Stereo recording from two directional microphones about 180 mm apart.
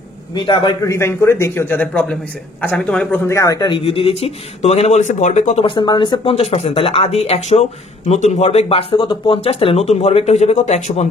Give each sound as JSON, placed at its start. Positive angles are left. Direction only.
{"t": 0.3, "sound": "a man's voice", "side_deg": 25}
{"t": 0.9, "sound": "speech", "side_deg": 15}
{"t": 3.3, "sound": "speech", "side_deg": 15}
{"t": 5.7, "sound": "speech", "side_deg": 25}